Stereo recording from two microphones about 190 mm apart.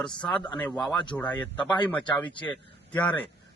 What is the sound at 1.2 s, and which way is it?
Speech, 25° left (ahead or behind).